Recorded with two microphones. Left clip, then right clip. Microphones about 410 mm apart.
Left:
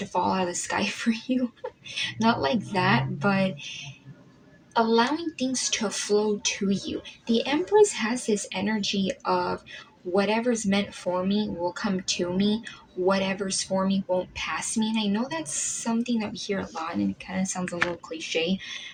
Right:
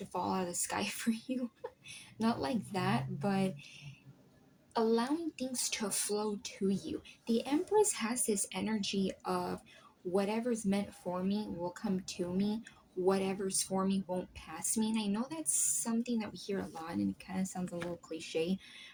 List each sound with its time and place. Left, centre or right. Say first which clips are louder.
0.1 s speech: left 11 dB; right